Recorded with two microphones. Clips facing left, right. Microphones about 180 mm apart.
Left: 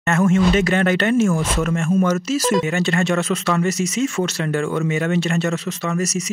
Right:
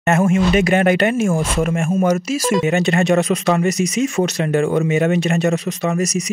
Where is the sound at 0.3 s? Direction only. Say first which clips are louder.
Right 2 dB; 15° right (ahead or behind).